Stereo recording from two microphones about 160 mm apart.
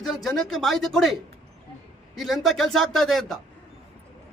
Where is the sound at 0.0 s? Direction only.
Centre (ahead or behind).